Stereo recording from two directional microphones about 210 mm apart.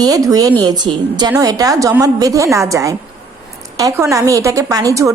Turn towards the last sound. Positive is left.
turn(degrees=-15)  # may be behind; listen again after turning